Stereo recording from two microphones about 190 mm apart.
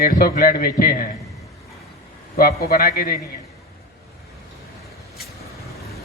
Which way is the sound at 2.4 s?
55° left (ahead or behind).